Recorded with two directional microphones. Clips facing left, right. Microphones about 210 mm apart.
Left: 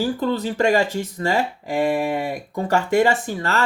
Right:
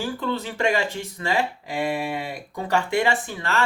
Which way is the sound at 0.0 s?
40° left (ahead or behind).